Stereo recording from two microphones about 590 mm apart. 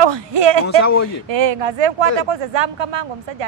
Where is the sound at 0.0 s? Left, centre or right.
Right.